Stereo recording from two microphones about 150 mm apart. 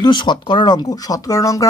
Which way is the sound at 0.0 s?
30° left (ahead or behind).